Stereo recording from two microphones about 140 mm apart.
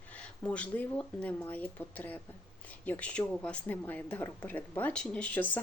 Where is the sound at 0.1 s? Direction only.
10° left (ahead or behind).